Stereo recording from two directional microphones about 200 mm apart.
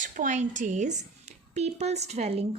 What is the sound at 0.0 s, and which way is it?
A woman's voice, 40° right (ahead or behind).